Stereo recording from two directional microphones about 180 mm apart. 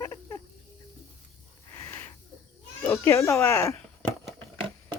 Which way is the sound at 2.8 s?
15° left (ahead or behind).